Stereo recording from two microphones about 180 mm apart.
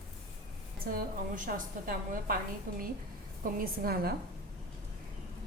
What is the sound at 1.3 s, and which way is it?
A woman's voice, 50° right (ahead or behind).